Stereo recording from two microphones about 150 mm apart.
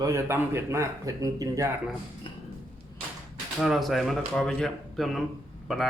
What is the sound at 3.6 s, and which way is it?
A man's voice, centre (ahead or behind).